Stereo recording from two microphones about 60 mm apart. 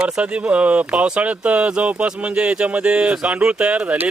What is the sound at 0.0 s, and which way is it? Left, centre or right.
Speech, centre.